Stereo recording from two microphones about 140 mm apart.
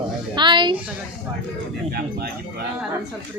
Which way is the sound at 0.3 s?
35° right (ahead or behind).